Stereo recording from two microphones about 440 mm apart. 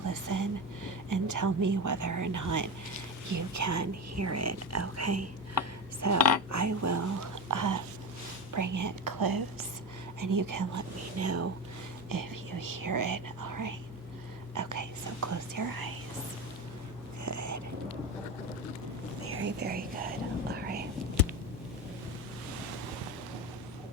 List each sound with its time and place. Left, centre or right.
0.0 s a woman's voice: right
12.0 s speech: right
14.5 s whispering: right
17.2 s whispering: right
19.3 s whispering: right